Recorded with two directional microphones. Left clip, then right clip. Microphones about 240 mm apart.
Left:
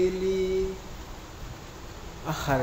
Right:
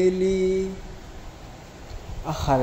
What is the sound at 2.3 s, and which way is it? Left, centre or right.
Speech, centre.